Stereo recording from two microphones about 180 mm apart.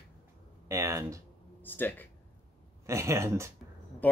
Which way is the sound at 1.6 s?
10° left (ahead or behind).